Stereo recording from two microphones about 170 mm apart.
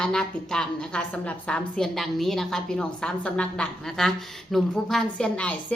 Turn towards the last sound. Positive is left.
turn(degrees=10)  # may be behind; listen again after turning